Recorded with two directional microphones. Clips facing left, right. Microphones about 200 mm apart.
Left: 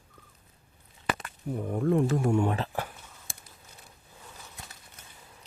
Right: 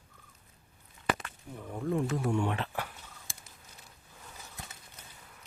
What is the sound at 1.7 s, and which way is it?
Speech, 60° left (ahead or behind).